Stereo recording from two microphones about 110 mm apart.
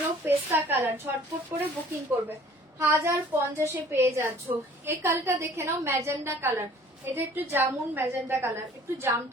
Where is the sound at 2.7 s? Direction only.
25° right (ahead or behind).